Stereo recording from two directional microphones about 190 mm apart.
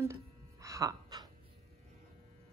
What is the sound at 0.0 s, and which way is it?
Music, 15° right (ahead or behind).